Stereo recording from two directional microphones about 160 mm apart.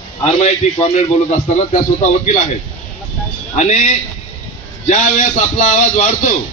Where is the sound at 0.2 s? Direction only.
45° left (ahead or behind).